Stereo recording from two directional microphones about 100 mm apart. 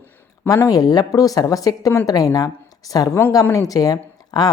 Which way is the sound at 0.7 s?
40° left (ahead or behind).